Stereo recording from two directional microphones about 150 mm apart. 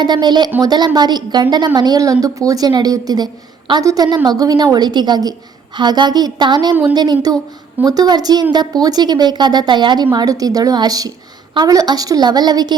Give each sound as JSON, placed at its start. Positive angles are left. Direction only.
{"t": 0.0, "sound": "a woman's voice", "side_deg": -30}